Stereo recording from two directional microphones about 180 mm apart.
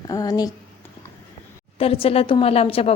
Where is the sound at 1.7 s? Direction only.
30° left (ahead or behind).